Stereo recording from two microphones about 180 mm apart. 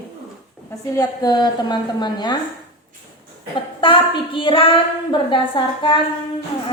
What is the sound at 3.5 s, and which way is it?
A woman's voice, 25° left (ahead or behind).